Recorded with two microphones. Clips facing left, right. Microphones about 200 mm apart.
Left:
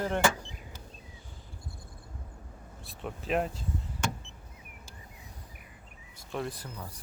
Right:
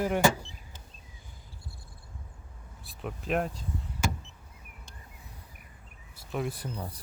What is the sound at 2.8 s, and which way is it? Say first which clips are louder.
Speech: right 1 dB; centre (ahead or behind).